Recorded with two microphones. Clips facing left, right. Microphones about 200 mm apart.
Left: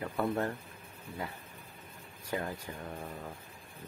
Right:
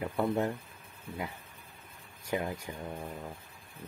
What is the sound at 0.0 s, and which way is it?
Speech, 15° right (ahead or behind).